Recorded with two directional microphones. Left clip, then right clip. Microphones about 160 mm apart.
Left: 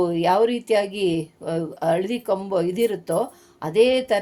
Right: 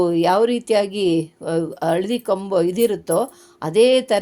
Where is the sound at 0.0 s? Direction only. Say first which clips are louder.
Right 2 dB; 35° right (ahead or behind).